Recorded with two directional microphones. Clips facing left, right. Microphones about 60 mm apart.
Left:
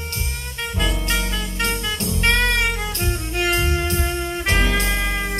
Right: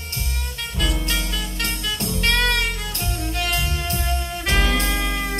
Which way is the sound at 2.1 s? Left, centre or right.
Left.